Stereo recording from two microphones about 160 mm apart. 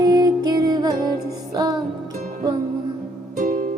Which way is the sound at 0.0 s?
25° right (ahead or behind).